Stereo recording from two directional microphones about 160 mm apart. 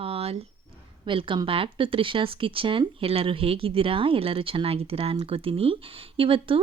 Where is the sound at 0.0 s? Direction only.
35° right (ahead or behind).